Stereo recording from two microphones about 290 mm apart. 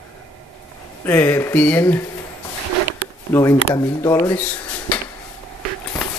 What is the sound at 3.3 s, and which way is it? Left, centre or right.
Speech, centre.